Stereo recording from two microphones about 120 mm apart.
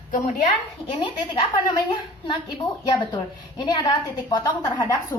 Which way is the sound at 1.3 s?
40° left (ahead or behind).